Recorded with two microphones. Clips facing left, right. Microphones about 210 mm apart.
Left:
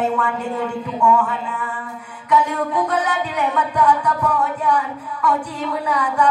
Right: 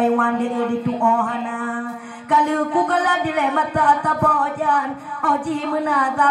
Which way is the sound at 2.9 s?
50° right (ahead or behind).